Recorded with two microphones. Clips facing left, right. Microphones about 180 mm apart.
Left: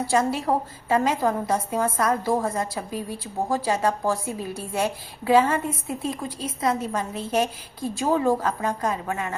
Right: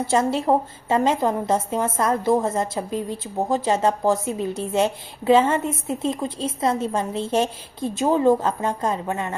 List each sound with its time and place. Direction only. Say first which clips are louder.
0.0 s a woman's voice: right 2 dB; 25° right (ahead or behind)